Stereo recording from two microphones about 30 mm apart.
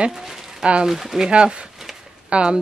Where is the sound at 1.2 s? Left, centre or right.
Right.